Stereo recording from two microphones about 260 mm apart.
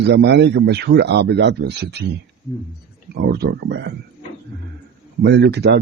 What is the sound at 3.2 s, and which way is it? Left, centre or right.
Speech, right.